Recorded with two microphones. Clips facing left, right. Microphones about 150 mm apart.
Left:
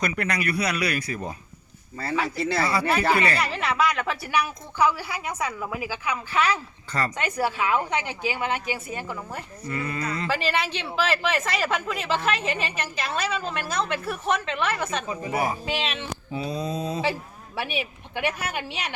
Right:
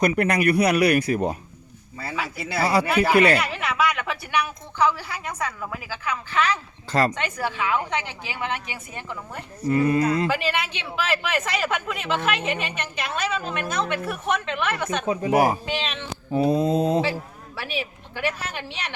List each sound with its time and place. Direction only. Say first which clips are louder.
0.0 s speech: right 7 dB; 55° right (ahead or behind)
2.0 s a woman's voice: left 4 dB; 5° right (ahead or behind)
9.6 s speech: right 10 dB; 45° right (ahead or behind)
10.2 s speech: right 1 dB; centre (ahead or behind)
15.0 s speech: right 7 dB; 75° right (ahead or behind)
15.6 s speech: even; 5° left (ahead or behind)
16.3 s speech: right 10 dB; 55° right (ahead or behind)
17.6 s a woman's voice: left 1 dB; 20° left (ahead or behind)